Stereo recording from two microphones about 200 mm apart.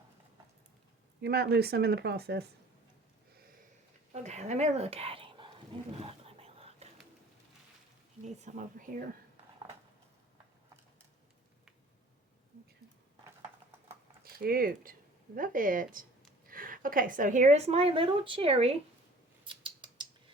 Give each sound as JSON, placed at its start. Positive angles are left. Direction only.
{"t": 1.2, "sound": "speech", "side_deg": -55}
{"t": 4.1, "sound": "a sound", "side_deg": -35}
{"t": 8.2, "sound": "a woman's voice", "side_deg": -35}
{"t": 14.3, "sound": "a woman's voice", "side_deg": -50}
{"t": 19.5, "sound": "scissors", "side_deg": -25}